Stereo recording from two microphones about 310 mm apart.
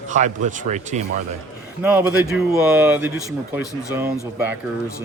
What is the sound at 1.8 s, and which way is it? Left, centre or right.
Speech, centre.